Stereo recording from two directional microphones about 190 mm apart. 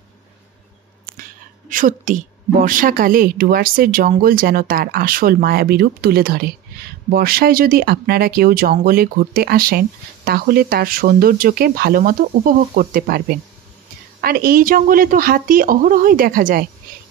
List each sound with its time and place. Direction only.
1.7 s a woman's voice: 45° right (ahead or behind)